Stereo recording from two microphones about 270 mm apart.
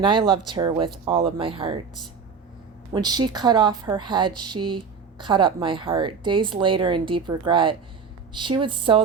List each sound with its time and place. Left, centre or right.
0.0 s a woman's voice: centre
2.9 s a woman's voice: centre